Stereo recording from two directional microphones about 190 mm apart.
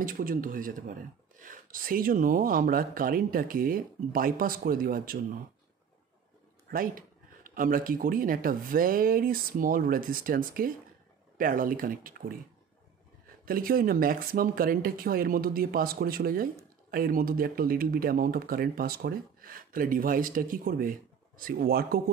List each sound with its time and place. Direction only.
0.0 s speech: 50° right (ahead or behind)
6.7 s speech: 45° right (ahead or behind)
13.5 s speech: 50° right (ahead or behind)